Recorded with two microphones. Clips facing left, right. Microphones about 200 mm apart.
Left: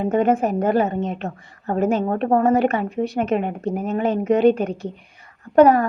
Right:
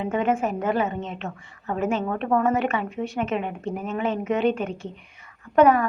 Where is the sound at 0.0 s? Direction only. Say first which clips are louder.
Left 5 dB; 40° left (ahead or behind).